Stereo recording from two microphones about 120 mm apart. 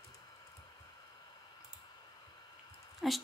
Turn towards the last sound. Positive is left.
turn(degrees=0)  # may be behind; listen again after turning